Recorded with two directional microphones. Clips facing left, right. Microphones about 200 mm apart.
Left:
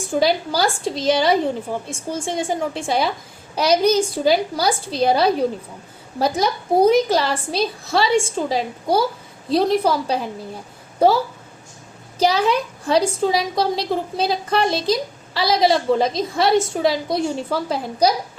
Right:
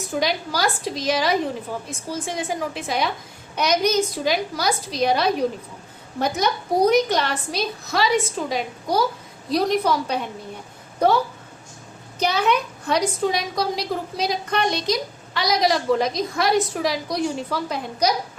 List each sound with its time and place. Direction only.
0.1 s a woman's voice: 30° left (ahead or behind)
12.2 s a woman's voice: 30° left (ahead or behind)